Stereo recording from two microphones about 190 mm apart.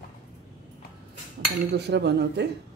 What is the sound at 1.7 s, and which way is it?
Speech, 60° right (ahead or behind).